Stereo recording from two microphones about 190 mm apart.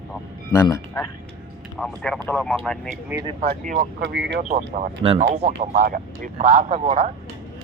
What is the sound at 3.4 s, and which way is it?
Speech, 45° right (ahead or behind).